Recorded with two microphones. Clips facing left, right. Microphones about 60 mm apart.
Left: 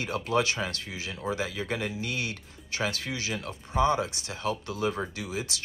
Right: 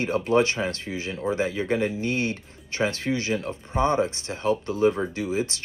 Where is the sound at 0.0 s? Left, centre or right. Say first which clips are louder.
Right 6 dB; right.